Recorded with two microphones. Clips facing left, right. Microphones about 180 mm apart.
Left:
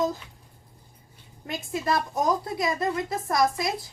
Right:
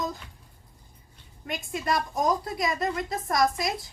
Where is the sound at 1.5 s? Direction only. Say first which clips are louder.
Left 2 dB; 25° left (ahead or behind).